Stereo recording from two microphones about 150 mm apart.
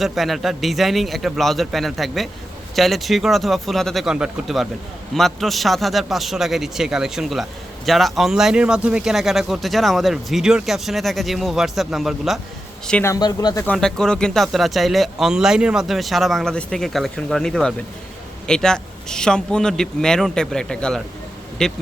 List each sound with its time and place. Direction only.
0.0 s speech: centre (ahead or behind)
12.9 s a man's voice: 15° left (ahead or behind)
13.1 s speech: 25° left (ahead or behind)
13.7 s speech: 5° left (ahead or behind)